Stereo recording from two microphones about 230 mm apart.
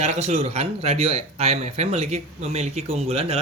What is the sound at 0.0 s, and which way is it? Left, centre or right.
Speech, right.